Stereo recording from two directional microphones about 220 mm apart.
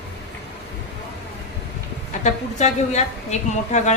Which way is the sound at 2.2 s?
30° left (ahead or behind).